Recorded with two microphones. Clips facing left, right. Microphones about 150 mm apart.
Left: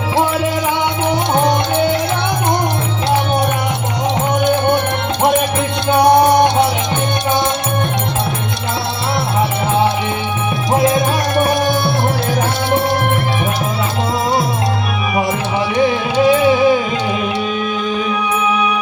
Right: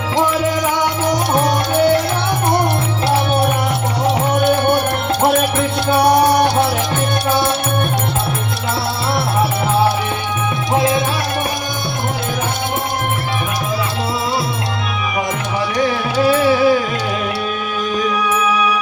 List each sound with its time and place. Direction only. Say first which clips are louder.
1.0 s music: left 2 dB; 10° right (ahead or behind)
4.4 s music: left 1 dB; 10° right (ahead or behind)
6.0 s music: left 3 dB; 10° right (ahead or behind)
10.7 s music: left 2 dB; 25° left (ahead or behind)
15.8 s music: left 3 dB; 15° left (ahead or behind)